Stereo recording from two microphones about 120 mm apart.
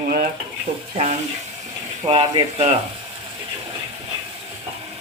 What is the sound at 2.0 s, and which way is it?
Speech, 45° right (ahead or behind).